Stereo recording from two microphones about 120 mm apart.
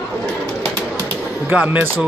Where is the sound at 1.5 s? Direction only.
10° right (ahead or behind).